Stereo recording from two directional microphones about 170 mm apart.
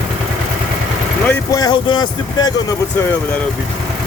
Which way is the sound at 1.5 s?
25° left (ahead or behind).